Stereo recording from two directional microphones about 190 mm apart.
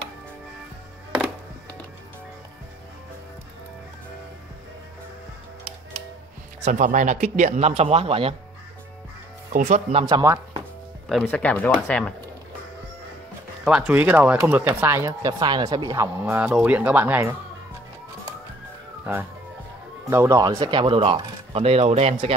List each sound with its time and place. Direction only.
6.6 s a man's voice: 40° right (ahead or behind)
9.5 s a man's voice: 45° right (ahead or behind)
10.0 s speech: 20° right (ahead or behind)
11.1 s speech: 5° left (ahead or behind)
13.7 s speech: 5° right (ahead or behind)
19.1 s speech: 5° right (ahead or behind); by 22.1 s 35° right (ahead or behind)